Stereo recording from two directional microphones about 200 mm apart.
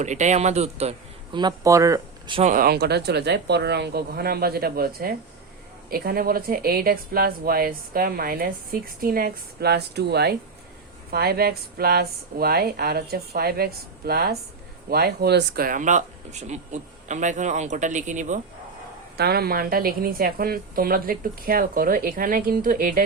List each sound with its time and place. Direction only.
0.0 s speech: 35° right (ahead or behind); by 2.4 s 20° right (ahead or behind)
2.4 s a woman's voice: 40° right (ahead or behind)
19.1 s a woman's voice: 55° right (ahead or behind)